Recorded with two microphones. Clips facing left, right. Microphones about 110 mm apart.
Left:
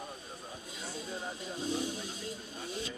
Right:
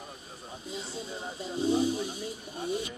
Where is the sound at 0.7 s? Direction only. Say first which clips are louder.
Right 5 dB; 25° right (ahead or behind).